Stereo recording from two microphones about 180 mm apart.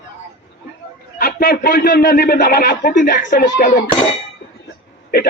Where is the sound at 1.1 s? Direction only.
55° left (ahead or behind).